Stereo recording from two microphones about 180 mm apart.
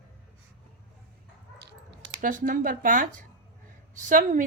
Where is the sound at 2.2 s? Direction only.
45° right (ahead or behind).